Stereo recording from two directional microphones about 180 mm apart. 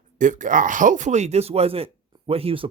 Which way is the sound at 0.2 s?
45° right (ahead or behind).